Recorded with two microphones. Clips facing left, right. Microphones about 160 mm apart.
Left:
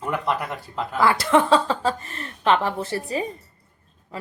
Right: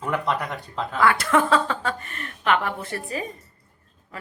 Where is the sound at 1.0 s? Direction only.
30° left (ahead or behind).